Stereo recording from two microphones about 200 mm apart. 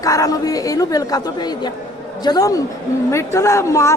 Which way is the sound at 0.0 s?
15° left (ahead or behind).